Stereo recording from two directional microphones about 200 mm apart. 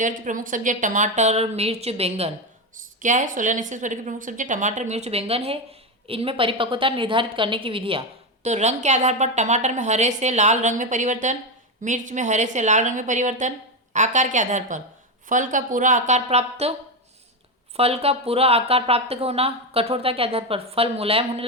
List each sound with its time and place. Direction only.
0.0 s a woman's voice: 40° right (ahead or behind)
17.7 s a woman's voice: 30° right (ahead or behind)